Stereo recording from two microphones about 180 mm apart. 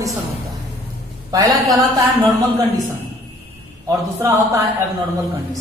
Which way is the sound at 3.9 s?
15° right (ahead or behind).